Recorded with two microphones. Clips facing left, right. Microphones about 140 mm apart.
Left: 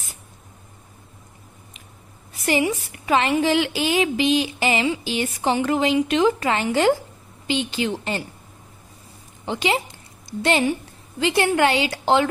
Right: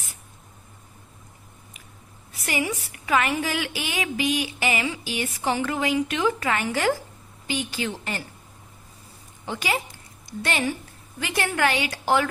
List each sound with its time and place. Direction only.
2.4 s a woman's voice: 25° left (ahead or behind)
9.5 s a woman's voice: 25° left (ahead or behind)